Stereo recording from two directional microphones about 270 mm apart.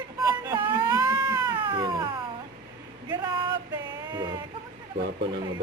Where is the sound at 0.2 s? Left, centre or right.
Centre.